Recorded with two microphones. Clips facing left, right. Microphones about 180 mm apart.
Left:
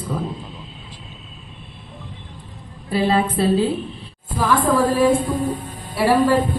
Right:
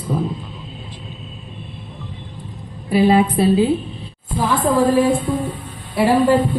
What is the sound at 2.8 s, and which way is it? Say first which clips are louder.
Speech: right 5 dB; 15° right (ahead or behind).